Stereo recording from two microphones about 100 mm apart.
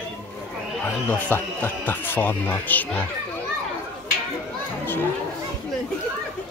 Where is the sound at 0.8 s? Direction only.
20° left (ahead or behind).